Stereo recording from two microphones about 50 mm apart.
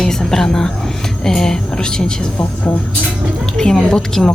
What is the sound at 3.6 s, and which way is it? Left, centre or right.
Speech, centre.